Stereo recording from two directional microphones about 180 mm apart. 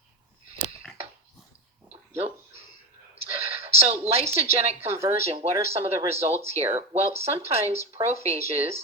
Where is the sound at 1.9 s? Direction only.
35° right (ahead or behind).